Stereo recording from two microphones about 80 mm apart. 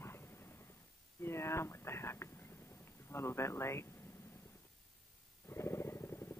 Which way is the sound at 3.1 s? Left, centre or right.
Left.